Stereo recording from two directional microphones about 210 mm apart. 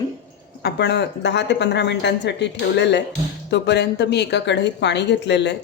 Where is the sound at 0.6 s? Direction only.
50° left (ahead or behind).